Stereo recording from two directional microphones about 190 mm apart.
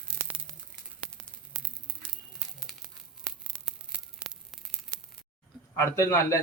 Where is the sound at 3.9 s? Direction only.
10° right (ahead or behind).